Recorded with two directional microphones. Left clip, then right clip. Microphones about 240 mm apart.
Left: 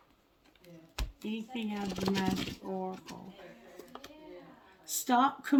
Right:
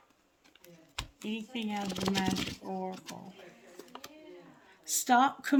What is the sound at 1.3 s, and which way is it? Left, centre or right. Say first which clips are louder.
Speech: right 1 dB; right.